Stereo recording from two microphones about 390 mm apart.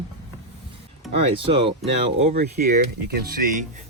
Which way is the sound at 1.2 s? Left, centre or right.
Centre.